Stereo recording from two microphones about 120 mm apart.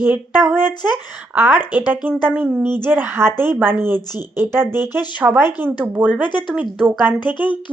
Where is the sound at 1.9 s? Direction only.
15° right (ahead or behind).